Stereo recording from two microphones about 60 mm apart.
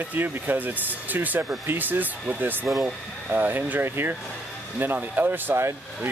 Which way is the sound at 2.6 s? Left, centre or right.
Centre.